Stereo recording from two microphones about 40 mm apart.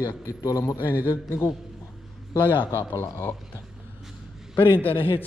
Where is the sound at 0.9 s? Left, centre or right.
Right.